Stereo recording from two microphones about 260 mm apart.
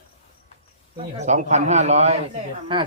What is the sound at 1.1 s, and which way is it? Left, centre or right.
A man's voice, right.